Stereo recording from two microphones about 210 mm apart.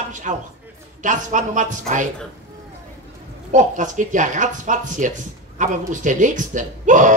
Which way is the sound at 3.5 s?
35° right (ahead or behind).